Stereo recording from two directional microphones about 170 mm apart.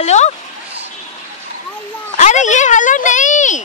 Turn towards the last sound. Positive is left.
turn(degrees=45)  # may be behind; listen again after turning